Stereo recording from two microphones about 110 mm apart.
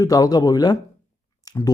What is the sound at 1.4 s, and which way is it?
Chewing, 30° left (ahead or behind).